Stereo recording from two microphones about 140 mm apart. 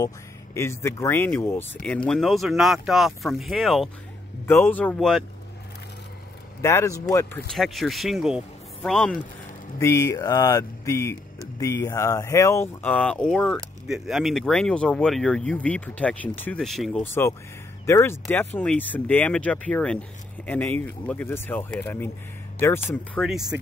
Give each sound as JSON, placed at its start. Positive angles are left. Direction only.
{"t": 0.6, "sound": "speech", "side_deg": 20}
{"t": 4.5, "sound": "speech", "side_deg": 15}
{"t": 6.6, "sound": "speech", "side_deg": 20}
{"t": 7.5, "sound": "speech", "side_deg": 0}
{"t": 9.8, "sound": "speech", "side_deg": 20}
{"t": 13.8, "sound": "speech", "side_deg": -5}
{"t": 17.0, "sound": "speech", "side_deg": 20}
{"t": 23.2, "sound": "speech", "side_deg": -5}